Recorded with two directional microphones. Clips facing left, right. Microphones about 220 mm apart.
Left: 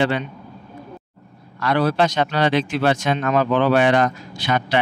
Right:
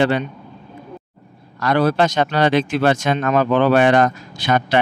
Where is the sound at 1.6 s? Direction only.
45° right (ahead or behind).